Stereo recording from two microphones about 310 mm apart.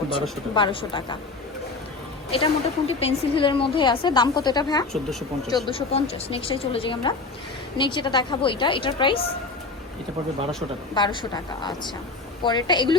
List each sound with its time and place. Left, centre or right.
0.1 s a woman's voice: centre
2.3 s a woman's voice: centre
10.9 s a woman's voice: centre